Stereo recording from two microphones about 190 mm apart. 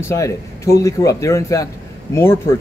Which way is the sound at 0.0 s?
15° left (ahead or behind).